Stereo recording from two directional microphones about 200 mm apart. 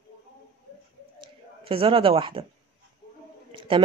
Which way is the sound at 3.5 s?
25° right (ahead or behind).